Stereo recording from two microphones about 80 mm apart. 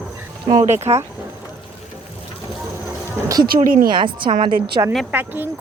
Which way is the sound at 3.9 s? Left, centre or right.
Right.